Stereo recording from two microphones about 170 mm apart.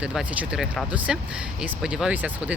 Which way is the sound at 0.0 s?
5° right (ahead or behind).